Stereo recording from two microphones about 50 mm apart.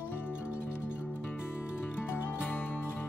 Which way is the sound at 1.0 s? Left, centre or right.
Left.